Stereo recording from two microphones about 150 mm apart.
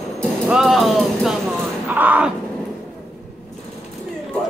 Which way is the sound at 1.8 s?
10° right (ahead or behind).